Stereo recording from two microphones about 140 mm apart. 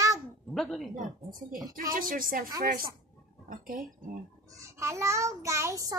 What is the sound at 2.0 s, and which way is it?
A woman's voice, 85° right.